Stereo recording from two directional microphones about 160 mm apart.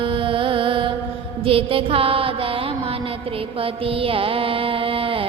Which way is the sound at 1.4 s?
35° right (ahead or behind).